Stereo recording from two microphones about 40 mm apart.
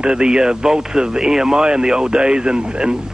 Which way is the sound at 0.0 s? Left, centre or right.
Right.